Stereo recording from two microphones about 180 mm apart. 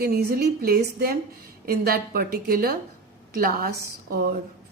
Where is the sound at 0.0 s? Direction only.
60° right (ahead or behind).